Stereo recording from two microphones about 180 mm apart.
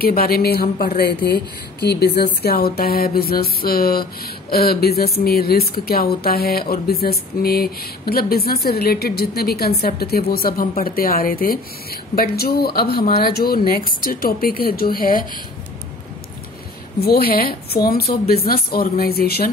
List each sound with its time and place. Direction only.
0.0 s speech: 55° left (ahead or behind)
17.0 s speech: 55° left (ahead or behind)